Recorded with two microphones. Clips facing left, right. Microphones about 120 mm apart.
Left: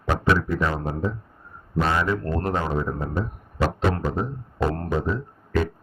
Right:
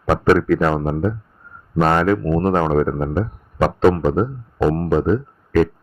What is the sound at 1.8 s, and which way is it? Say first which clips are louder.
A man's voice: right 8 dB; 55° right (ahead or behind).